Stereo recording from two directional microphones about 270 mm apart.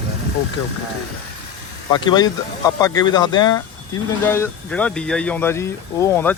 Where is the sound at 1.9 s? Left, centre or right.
Centre.